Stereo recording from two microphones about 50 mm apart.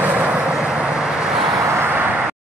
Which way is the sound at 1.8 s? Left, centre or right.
Right.